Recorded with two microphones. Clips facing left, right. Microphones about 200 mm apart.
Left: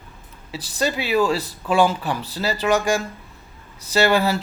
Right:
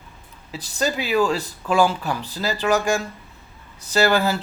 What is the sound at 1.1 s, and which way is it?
Speech, 5° left (ahead or behind).